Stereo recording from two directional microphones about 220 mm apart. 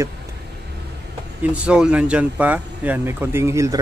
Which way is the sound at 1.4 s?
5° right (ahead or behind).